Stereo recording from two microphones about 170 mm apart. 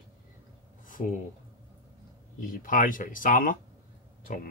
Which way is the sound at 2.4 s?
55° left (ahead or behind).